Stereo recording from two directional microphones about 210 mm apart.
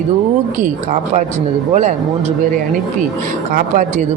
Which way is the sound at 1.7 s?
35° right (ahead or behind).